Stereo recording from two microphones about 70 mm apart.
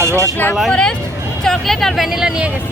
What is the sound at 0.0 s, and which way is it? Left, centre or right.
Vehicle, right.